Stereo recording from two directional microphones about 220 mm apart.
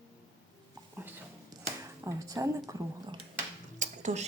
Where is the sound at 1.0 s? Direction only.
10° right (ahead or behind).